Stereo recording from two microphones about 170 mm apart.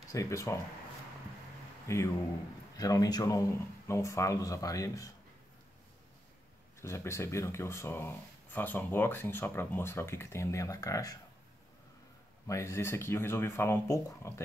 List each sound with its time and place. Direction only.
0.1 s speech: 20° left (ahead or behind)
1.9 s speech: 15° left (ahead or behind)
6.8 s speech: 15° left (ahead or behind)
12.4 s speech: 15° left (ahead or behind)